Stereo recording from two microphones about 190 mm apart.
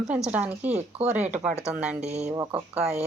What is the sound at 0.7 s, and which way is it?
Speech, 35° right (ahead or behind).